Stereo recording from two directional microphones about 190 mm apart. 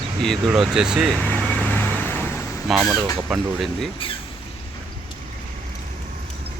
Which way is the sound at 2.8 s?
Centre (ahead or behind).